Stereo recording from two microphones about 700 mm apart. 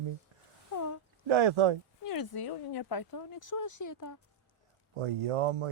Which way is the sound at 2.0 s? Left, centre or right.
Left.